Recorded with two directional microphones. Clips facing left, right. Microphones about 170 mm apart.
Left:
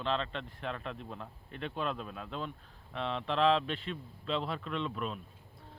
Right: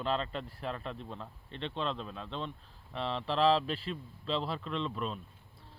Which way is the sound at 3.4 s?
35° right (ahead or behind).